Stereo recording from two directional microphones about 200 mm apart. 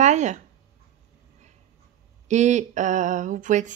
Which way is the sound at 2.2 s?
35° right (ahead or behind).